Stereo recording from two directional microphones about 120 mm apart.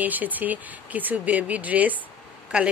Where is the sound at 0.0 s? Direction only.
15° right (ahead or behind).